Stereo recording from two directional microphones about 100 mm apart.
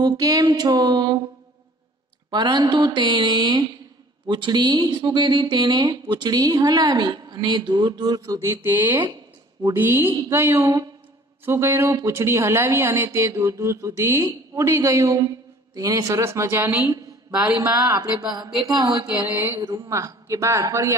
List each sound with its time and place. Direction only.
0.0 s music: 40° right (ahead or behind)
2.3 s a man's voice: 45° right (ahead or behind)
17.7 s music: 35° right (ahead or behind)
19.2 s speech: 25° right (ahead or behind)
19.9 s music: 30° right (ahead or behind)